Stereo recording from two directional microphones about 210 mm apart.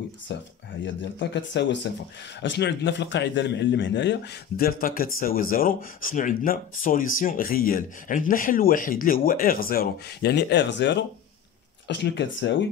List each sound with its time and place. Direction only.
0.3 s a man's voice: 55° left (ahead or behind)